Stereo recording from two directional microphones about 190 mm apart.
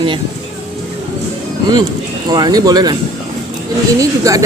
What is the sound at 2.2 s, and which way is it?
Speech, 20° right (ahead or behind).